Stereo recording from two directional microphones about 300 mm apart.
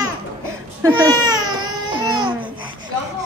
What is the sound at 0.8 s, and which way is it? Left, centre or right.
Baby cry, centre.